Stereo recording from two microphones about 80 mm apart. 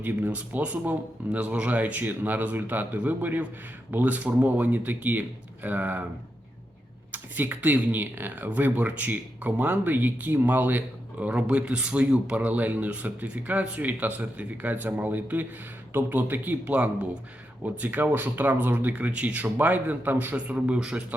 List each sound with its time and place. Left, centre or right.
0.0 s speech: centre
7.1 s speech: right